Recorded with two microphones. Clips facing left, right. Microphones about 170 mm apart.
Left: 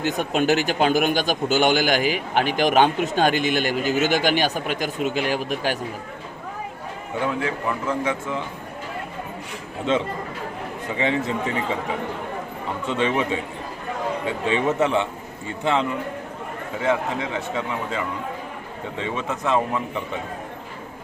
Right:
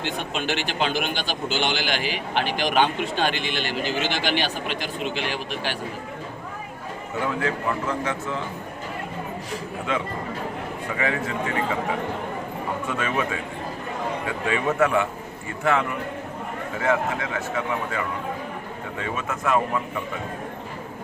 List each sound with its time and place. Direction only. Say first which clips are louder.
0.0 s a man's voice: left 6 dB; 45° left (ahead or behind)
7.4 s speech: even; 10° left (ahead or behind)
9.9 s a man's voice: left 5 dB; 25° left (ahead or behind)
12.9 s a man's voice: left 6 dB; 20° left (ahead or behind)
18.9 s a man's voice: left 2 dB; 25° left (ahead or behind)